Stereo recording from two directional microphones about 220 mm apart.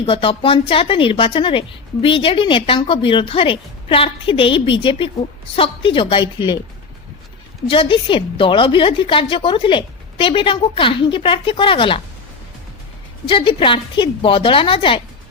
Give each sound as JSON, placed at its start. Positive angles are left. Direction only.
{"t": 0.0, "sound": "a woman's voice", "side_deg": 25}
{"t": 7.7, "sound": "a woman's voice", "side_deg": 25}
{"t": 13.2, "sound": "a woman's voice", "side_deg": 20}